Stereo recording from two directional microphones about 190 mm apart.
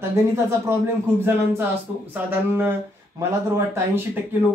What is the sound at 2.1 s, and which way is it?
Speech, 10° right (ahead or behind).